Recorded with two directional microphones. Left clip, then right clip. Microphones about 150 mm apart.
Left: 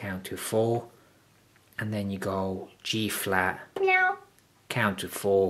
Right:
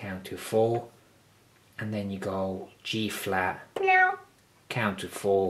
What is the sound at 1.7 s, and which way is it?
Speech, 40° left (ahead or behind).